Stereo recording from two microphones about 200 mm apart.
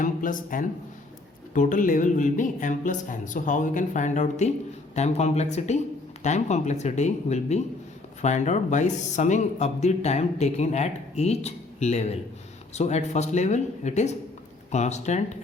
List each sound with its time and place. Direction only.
0.0 s speech: 40° left (ahead or behind)